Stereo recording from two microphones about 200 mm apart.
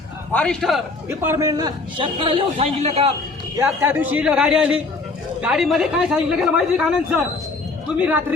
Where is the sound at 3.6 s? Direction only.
10° right (ahead or behind).